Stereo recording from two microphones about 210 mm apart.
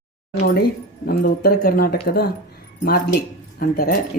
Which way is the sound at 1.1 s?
45° left (ahead or behind).